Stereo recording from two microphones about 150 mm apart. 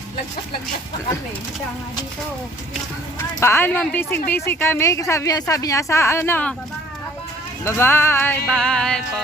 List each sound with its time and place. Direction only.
3.4 s a woman's voice: 15° left (ahead or behind)
7.6 s a woman's voice: 15° left (ahead or behind)
8.4 s music: 5° left (ahead or behind)